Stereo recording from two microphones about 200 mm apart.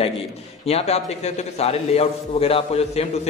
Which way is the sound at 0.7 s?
30° left (ahead or behind).